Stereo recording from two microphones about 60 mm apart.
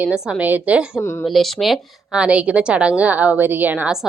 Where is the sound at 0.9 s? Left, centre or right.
Left.